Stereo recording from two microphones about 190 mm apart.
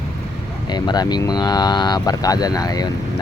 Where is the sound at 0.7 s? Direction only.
20° left (ahead or behind).